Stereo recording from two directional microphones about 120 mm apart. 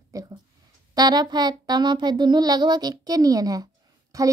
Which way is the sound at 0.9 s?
35° right (ahead or behind).